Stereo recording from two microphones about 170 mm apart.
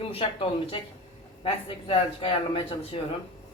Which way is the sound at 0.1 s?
35° left (ahead or behind).